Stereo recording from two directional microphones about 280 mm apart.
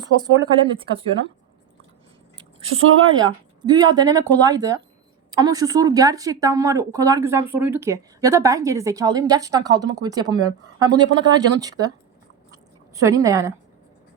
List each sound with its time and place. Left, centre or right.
0.0 s a woman's voice: centre
3.1 s a woman's voice: centre
12.9 s a woman's voice: centre